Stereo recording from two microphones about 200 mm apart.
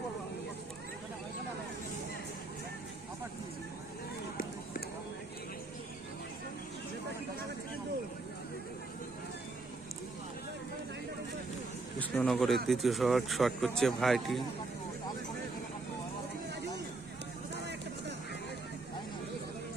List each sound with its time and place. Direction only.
11.9 s a man's voice: 5° left (ahead or behind)
16.5 s hubbub: 60° right (ahead or behind)